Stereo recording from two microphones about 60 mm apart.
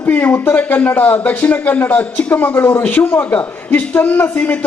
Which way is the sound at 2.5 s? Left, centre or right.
Left.